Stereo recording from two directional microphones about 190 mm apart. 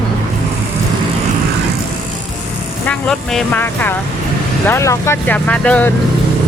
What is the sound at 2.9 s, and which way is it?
Speech, 5° left (ahead or behind).